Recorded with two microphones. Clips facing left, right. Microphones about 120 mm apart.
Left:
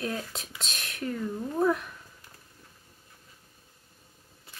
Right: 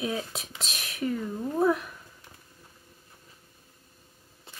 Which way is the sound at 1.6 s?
5° right (ahead or behind).